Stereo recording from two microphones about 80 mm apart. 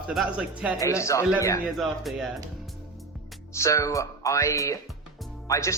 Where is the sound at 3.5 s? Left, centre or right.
Left.